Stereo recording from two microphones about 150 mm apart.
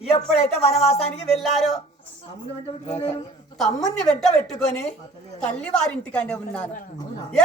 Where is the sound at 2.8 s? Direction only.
50° left (ahead or behind).